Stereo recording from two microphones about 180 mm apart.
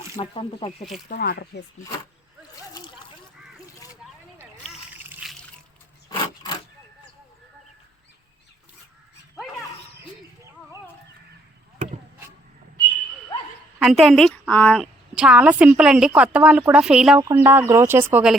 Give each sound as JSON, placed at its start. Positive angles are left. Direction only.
{"t": 0.2, "sound": "speech", "side_deg": 30}
{"t": 1.0, "sound": "speech", "side_deg": 50}
{"t": 5.0, "sound": "trickle", "side_deg": -10}
{"t": 13.7, "sound": "a woman's voice", "side_deg": 0}
{"t": 15.1, "sound": "a woman's voice", "side_deg": -5}